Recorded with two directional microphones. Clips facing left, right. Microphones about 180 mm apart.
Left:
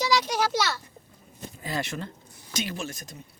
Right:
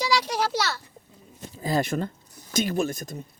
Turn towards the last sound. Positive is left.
turn(degrees=-50)  # may be behind; listen again after turning